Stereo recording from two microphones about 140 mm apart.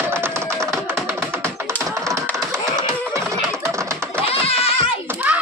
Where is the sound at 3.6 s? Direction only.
20° right (ahead or behind).